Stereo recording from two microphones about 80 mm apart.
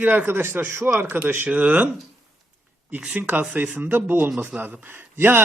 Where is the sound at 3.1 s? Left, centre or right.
Right.